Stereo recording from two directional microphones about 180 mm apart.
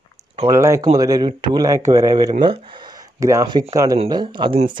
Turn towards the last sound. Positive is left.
turn(degrees=-30)  # may be behind; listen again after turning